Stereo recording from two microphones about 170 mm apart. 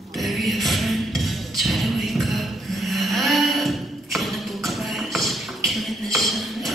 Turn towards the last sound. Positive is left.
turn(degrees=0)  # may be behind; listen again after turning